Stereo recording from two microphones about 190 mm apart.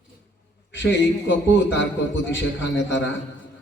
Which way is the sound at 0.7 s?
70° left (ahead or behind).